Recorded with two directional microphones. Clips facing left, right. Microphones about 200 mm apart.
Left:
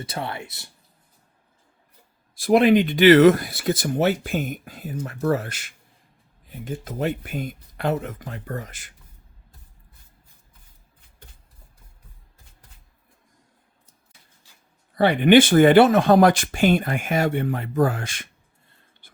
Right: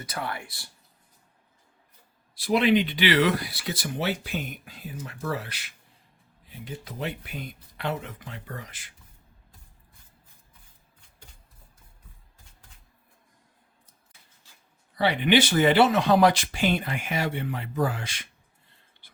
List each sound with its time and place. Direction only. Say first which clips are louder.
0.0 s speech: left 3 dB; 25° left (ahead or behind)
2.3 s speech: left 6 dB; 50° left (ahead or behind)
14.9 s speech: left 7 dB; 50° left (ahead or behind)
19.0 s writing: left 4 dB; 50° left (ahead or behind)